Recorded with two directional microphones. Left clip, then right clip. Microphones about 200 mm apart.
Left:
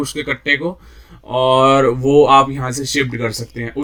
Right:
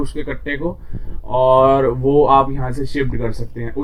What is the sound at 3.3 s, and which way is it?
Speech, 35° left (ahead or behind).